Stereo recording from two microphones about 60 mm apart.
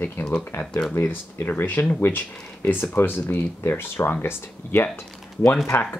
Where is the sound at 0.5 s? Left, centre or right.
Left.